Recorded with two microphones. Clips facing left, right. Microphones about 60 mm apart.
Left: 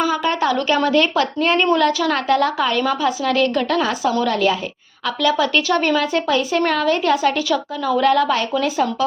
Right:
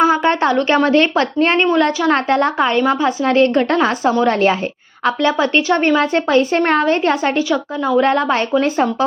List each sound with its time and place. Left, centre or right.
0.0 s a woman's voice: right
7.5 s a woman's voice: right